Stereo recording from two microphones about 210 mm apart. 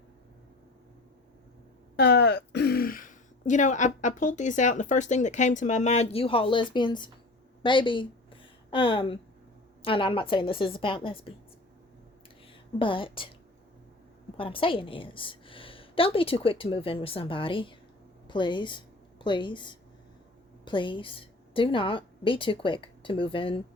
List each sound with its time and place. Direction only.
2.0 s speech: 55° left (ahead or behind); by 7.1 s 20° left (ahead or behind)
7.6 s a sound: 25° left (ahead or behind)
9.8 s a woman's voice: 25° left (ahead or behind)
12.8 s a woman's voice: 25° left (ahead or behind)
14.3 s a woman's voice: 25° left (ahead or behind)